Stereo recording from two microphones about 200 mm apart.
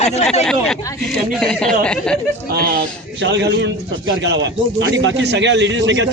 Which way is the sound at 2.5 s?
50° right (ahead or behind).